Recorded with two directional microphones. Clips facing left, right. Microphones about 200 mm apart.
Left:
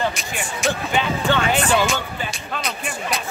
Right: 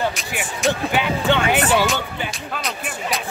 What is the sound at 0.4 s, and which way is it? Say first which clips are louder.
Speech: right 3 dB; 5° right (ahead or behind).